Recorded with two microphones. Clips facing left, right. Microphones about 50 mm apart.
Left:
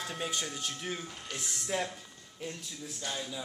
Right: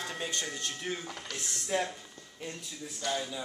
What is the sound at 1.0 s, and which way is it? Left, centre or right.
Speech, right.